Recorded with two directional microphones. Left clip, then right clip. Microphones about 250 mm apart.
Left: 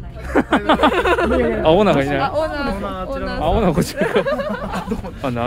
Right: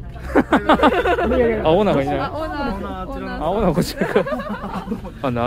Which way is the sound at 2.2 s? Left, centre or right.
Left.